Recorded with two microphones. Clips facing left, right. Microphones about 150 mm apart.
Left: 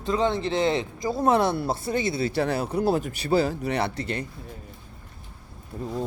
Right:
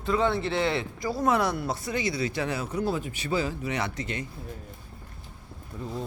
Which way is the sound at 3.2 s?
35° left (ahead or behind).